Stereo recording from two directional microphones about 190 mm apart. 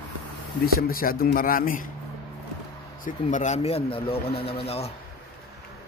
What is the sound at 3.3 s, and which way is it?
Speech, 40° left (ahead or behind).